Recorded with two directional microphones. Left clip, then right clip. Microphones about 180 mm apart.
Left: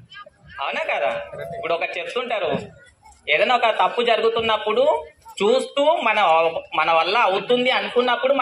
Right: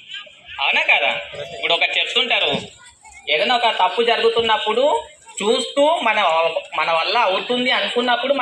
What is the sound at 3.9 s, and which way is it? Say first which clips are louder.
Speech: right 2 dB; 55° left (ahead or behind).